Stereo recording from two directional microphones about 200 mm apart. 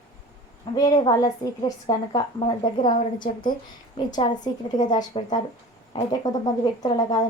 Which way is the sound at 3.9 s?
25° left (ahead or behind).